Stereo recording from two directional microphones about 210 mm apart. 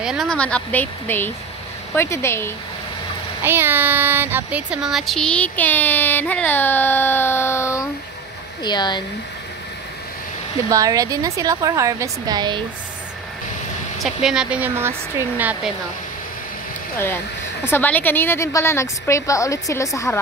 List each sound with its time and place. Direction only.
0.0 s speech: centre (ahead or behind)
3.4 s speech: 10° right (ahead or behind); by 9.0 s 20° left (ahead or behind)
10.7 s a woman's voice: 15° right (ahead or behind)
13.9 s speech: centre (ahead or behind)
17.6 s speech: 10° left (ahead or behind)